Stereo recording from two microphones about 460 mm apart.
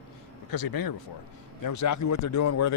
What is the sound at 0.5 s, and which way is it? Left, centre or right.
Speech, left.